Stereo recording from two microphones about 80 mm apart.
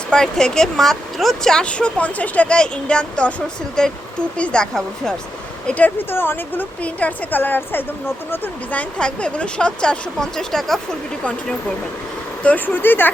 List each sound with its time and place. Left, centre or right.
0.1 s speech: centre
5.6 s a woman's voice: centre
12.4 s a woman's voice: centre